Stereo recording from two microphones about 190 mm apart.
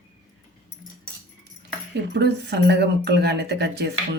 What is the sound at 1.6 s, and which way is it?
Speech, 60° right (ahead or behind).